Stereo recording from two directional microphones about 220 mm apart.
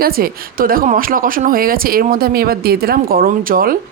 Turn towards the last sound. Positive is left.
turn(degrees=-40)  # may be behind; listen again after turning